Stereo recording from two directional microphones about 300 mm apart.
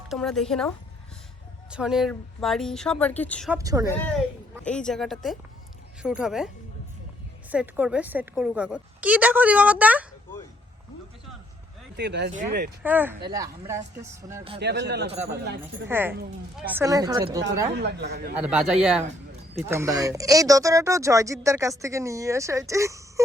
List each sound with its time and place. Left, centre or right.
0.1 s speech: centre
1.7 s a woman's voice: centre
3.6 s speech: centre
3.8 s a woman's voice: centre
7.5 s a woman's voice: centre
11.9 s speech: right
12.8 s a woman's voice: centre
14.6 s speech: right
15.9 s speech: centre
17.7 s speech: right
18.3 s a woman's voice: centre